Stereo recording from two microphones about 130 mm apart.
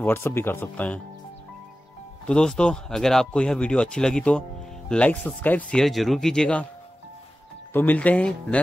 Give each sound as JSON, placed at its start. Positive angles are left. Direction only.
{"t": 0.0, "sound": "speech", "side_deg": 15}
{"t": 2.2, "sound": "speech", "side_deg": 5}
{"t": 7.7, "sound": "speech", "side_deg": 15}